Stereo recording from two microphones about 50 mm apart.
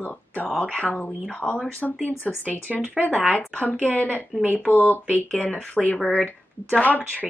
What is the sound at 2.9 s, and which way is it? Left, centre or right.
Speech, left.